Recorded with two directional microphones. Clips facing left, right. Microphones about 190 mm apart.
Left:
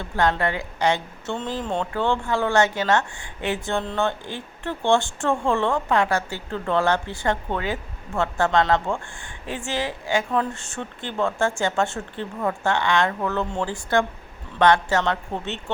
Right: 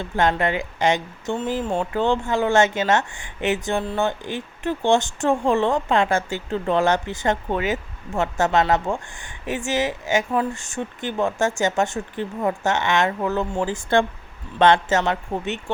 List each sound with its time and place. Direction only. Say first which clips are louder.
0.0 s a woman's voice: right 1 dB; 20° right (ahead or behind)
2.0 s speech: right 2 dB; 20° right (ahead or behind)
3.8 s a woman's voice: right 1 dB; 5° right (ahead or behind)
14.6 s a woman's voice: right 2 dB; 25° right (ahead or behind)